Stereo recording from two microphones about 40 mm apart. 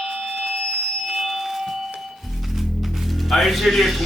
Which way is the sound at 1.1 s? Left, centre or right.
Centre.